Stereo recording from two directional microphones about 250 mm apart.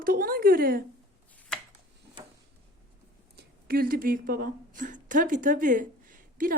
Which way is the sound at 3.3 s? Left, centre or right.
Right.